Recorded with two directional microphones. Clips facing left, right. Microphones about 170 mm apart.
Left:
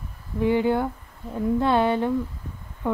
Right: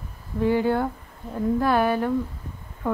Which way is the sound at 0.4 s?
15° left (ahead or behind).